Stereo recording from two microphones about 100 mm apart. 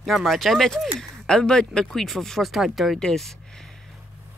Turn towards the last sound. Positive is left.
turn(degrees=5)  # may be behind; listen again after turning